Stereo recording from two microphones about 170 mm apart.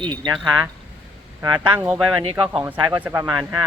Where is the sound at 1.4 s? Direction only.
20° right (ahead or behind).